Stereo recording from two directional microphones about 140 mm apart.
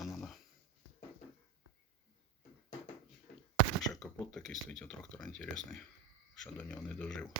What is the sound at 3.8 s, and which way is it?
Speech, centre (ahead or behind).